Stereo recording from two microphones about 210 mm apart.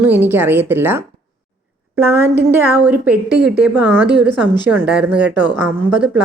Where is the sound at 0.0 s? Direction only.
10° right (ahead or behind).